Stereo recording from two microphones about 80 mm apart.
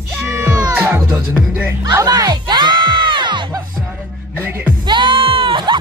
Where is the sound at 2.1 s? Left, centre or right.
Right.